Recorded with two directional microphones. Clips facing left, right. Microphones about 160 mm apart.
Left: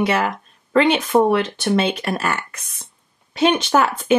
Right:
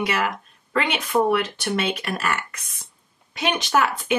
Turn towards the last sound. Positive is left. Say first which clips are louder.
# left 5 dB
turn(degrees=30)  # may be behind; listen again after turning